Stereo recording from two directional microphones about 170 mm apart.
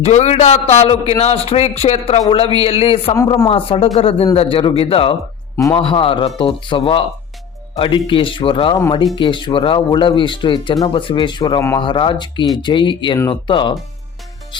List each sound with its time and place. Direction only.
0.0 s a man's voice: 40° left (ahead or behind)